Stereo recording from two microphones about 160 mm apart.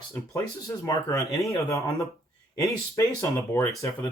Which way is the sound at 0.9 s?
20° left (ahead or behind).